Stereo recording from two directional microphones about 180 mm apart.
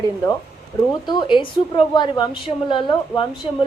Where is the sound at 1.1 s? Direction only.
25° left (ahead or behind).